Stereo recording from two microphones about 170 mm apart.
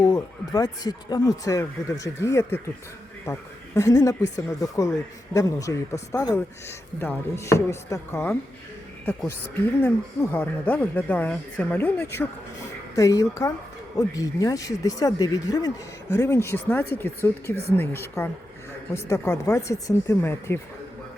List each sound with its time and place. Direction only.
0.0 s a man's voice: 25° left (ahead or behind)